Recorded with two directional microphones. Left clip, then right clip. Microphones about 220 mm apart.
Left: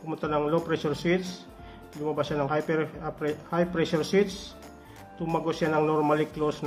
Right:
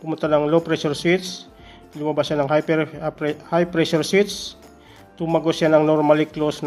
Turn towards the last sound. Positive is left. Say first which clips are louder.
# right 6 dB
turn(degrees=-40)  # may be behind; listen again after turning